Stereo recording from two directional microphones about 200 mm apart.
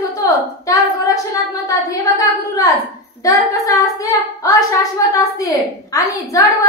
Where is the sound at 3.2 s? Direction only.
15° left (ahead or behind).